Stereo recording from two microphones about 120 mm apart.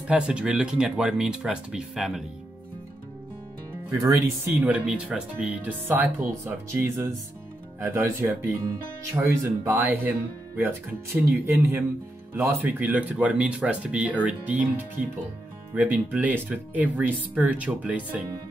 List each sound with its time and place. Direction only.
0.0 s speech: 10° right (ahead or behind)
4.5 s speech: 15° right (ahead or behind)
11.2 s speech: 15° right (ahead or behind)